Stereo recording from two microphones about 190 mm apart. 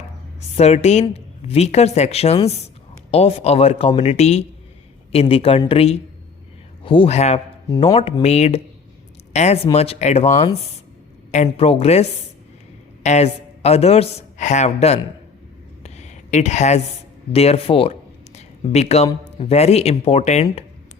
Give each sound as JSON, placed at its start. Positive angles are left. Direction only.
{"t": 0.5, "sound": "a woman's voice", "side_deg": 35}
{"t": 15.8, "sound": "a sound", "side_deg": 35}
{"t": 17.3, "sound": "a woman's voice", "side_deg": 30}